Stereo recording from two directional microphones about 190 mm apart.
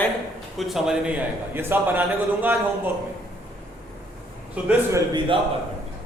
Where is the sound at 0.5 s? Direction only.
Centre (ahead or behind).